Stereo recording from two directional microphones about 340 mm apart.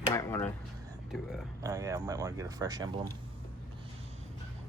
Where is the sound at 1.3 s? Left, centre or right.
Centre.